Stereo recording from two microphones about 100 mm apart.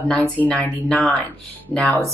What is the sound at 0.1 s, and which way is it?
Speech, 15° left (ahead or behind).